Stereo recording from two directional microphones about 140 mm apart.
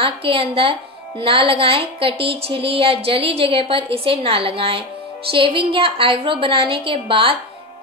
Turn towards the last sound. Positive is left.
turn(degrees=-40)  # may be behind; listen again after turning